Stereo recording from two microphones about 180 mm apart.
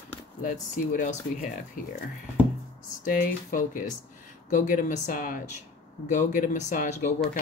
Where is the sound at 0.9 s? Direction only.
45° left (ahead or behind).